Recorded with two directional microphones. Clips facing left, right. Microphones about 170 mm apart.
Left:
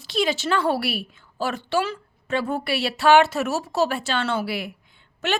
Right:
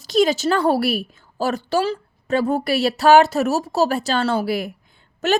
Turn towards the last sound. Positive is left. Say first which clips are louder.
# right 6 dB
turn(degrees=-40)  # may be behind; listen again after turning